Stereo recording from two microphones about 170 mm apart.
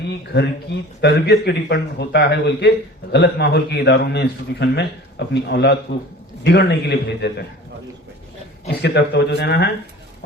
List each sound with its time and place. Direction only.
0.7 s speech: 90° left
1.0 s a man's voice: 75° left (ahead or behind)
5.3 s speech: 90° left
6.4 s speech: 80° left
8.6 s speech: 85° left